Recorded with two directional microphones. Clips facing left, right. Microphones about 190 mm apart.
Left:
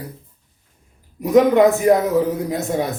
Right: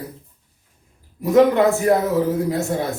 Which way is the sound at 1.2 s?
15° left (ahead or behind).